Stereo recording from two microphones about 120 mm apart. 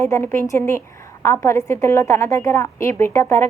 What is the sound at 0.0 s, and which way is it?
A woman's voice, 20° left (ahead or behind).